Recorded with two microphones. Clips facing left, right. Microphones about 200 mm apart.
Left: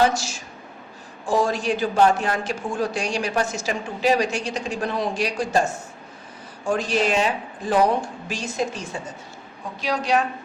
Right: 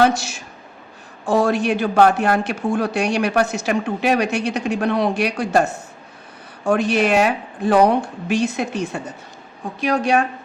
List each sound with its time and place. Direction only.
0.0 s a man's voice: 60° right (ahead or behind)
9.8 s a man's voice: 55° right (ahead or behind)